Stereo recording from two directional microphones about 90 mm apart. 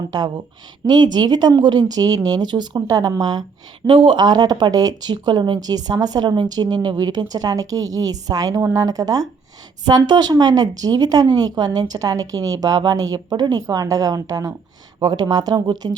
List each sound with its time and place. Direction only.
0.9 s a woman's voice: 55° right (ahead or behind)
3.8 s a woman's voice: 65° right (ahead or behind); by 13.6 s 50° right (ahead or behind)
13.7 s a woman's voice: 35° right (ahead or behind)